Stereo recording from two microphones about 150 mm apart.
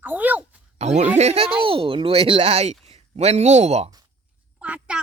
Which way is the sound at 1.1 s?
45° right (ahead or behind).